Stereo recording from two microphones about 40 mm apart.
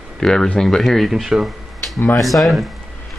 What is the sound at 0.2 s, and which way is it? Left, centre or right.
Speech, centre.